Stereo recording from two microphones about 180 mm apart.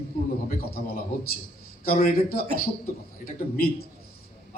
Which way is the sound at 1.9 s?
55° left (ahead or behind).